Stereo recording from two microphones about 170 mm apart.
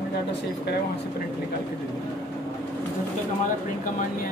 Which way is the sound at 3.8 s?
50° left (ahead or behind).